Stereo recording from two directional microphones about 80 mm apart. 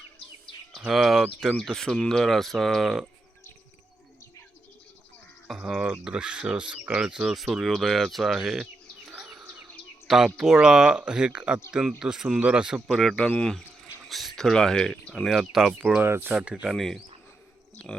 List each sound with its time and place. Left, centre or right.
0.8 s speech: centre
5.5 s speech: centre
9.0 s bird: centre
10.1 s speech: centre
13.0 s speech: centre
16.0 s speech: right
16.3 s speech: centre
16.7 s speech: centre